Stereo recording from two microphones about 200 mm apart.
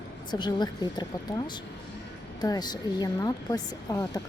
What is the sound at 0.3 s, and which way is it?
Speech, 20° left (ahead or behind).